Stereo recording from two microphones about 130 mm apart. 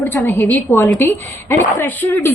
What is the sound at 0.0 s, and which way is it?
A woman's voice, 15° left (ahead or behind).